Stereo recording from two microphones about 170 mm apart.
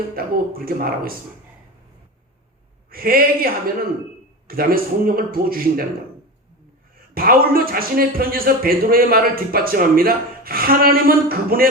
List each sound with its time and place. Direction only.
0.2 s speech: 60° right (ahead or behind)
2.9 s speech: 60° right (ahead or behind)
7.1 s speech: 60° right (ahead or behind)